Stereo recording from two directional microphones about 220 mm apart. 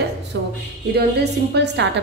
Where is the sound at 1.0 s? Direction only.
50° right (ahead or behind).